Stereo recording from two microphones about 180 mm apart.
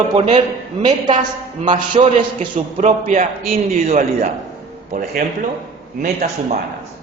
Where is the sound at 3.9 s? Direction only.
40° right (ahead or behind).